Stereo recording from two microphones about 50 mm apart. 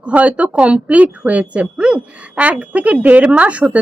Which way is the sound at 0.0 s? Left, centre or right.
Right.